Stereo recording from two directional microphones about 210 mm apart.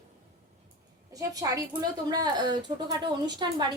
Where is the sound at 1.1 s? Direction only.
15° right (ahead or behind).